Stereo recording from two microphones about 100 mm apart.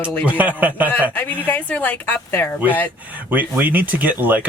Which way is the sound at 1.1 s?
20° left (ahead or behind).